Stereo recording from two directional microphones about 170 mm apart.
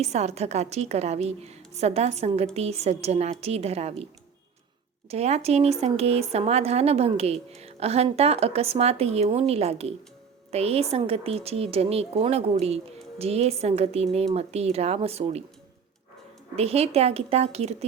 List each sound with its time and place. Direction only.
0.0 s speech: 40° right (ahead or behind)
5.0 s speech: 40° right (ahead or behind)
16.6 s speech: 35° right (ahead or behind)